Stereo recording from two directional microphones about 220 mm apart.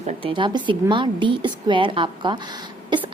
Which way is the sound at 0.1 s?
25° right (ahead or behind).